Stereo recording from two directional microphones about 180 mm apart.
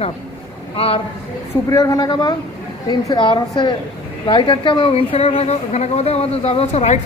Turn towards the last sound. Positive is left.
turn(degrees=35)  # may be behind; listen again after turning